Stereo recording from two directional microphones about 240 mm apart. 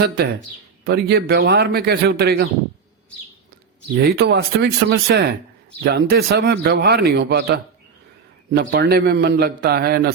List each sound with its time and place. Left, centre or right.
0.0 s a man's voice: right
3.9 s a man's voice: right